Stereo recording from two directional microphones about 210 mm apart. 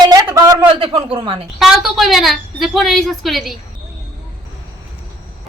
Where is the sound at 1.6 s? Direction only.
Centre (ahead or behind).